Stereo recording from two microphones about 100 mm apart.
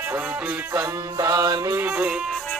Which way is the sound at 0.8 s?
40° right (ahead or behind).